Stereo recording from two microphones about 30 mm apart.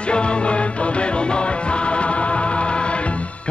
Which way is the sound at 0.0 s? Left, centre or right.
Left.